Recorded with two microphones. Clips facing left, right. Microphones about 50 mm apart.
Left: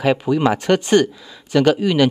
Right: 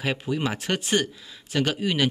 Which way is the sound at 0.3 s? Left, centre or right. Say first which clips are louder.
Left 9 dB; left.